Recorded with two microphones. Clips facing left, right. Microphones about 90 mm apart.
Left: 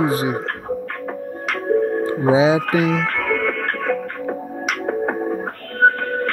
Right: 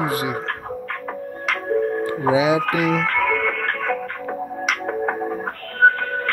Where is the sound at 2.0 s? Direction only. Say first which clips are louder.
Left 3 dB; 25° left (ahead or behind).